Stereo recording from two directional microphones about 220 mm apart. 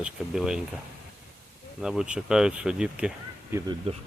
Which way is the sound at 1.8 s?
5° right (ahead or behind).